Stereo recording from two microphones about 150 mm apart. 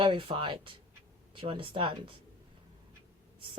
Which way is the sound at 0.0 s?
35° right (ahead or behind).